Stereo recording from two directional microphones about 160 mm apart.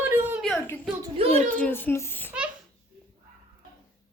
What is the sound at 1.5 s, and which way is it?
Speech, 10° left (ahead or behind).